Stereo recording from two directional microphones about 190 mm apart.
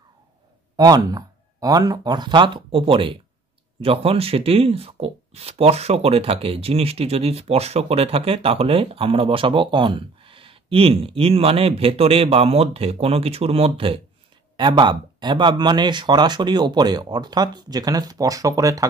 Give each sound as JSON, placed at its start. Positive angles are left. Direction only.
{"t": 0.7, "sound": "speech", "side_deg": -20}